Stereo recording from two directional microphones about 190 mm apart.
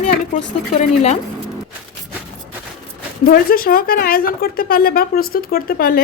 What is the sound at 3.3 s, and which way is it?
A woman's voice, 50° left (ahead or behind).